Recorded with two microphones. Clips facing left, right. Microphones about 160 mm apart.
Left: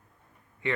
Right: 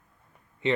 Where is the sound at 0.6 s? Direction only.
20° right (ahead or behind).